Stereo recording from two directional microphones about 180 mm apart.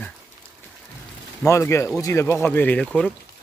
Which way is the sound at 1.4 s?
15° left (ahead or behind).